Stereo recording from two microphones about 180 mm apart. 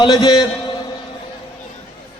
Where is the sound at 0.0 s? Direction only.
25° left (ahead or behind).